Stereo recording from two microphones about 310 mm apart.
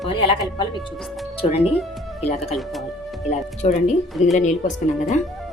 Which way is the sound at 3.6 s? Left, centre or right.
Left.